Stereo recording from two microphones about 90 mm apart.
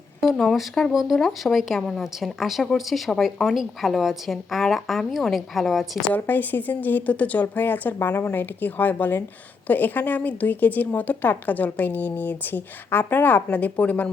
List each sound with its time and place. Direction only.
0.2 s speech: centre (ahead or behind)
6.1 s a woman's voice: 20° left (ahead or behind)